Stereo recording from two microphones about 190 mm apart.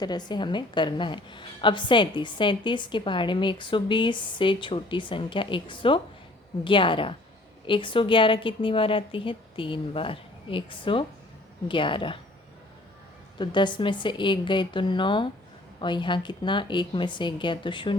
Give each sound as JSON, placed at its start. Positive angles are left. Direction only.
{"t": 0.0, "sound": "a woman's voice", "side_deg": 20}
{"t": 13.4, "sound": "a woman's voice", "side_deg": 25}